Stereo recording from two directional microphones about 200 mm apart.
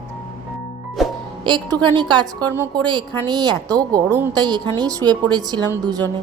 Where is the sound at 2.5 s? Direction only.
10° right (ahead or behind).